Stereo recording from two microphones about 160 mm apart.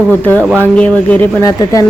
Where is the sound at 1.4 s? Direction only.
20° left (ahead or behind).